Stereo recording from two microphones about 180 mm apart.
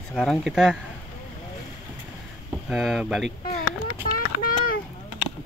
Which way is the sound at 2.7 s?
Centre (ahead or behind).